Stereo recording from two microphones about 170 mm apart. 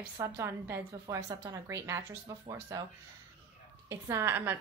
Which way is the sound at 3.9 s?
15° right (ahead or behind).